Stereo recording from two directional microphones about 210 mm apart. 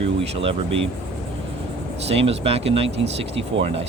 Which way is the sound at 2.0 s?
30° right (ahead or behind).